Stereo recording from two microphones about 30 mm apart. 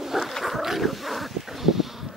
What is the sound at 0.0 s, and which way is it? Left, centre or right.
Wild animals, centre.